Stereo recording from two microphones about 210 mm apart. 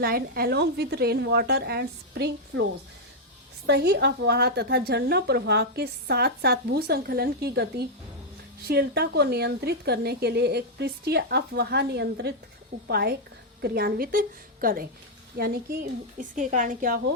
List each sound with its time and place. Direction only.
0.0 s a woman's voice: 45° right (ahead or behind)
3.7 s a woman's voice: 50° right (ahead or behind)